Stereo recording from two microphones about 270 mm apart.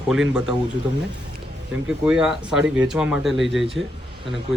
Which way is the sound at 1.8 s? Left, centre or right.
Centre.